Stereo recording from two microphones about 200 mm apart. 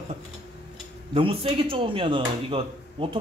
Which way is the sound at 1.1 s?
25° right (ahead or behind).